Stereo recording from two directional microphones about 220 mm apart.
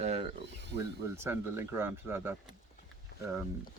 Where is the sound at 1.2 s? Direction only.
10° right (ahead or behind).